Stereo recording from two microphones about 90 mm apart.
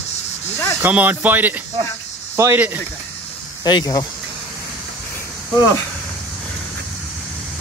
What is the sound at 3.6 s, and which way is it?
Speech, 50° left (ahead or behind).